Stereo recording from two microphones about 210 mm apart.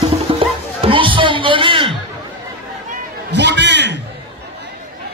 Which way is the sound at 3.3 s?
55° right (ahead or behind).